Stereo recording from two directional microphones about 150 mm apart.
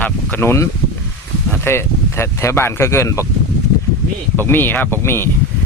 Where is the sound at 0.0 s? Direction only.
10° left (ahead or behind).